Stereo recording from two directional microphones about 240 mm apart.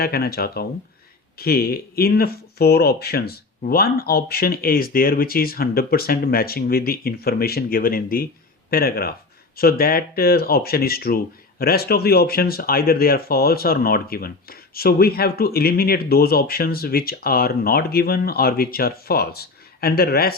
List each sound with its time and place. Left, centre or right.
0.0 s speech: left